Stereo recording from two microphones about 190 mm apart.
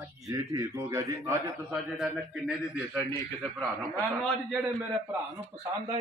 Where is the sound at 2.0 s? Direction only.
5° right (ahead or behind).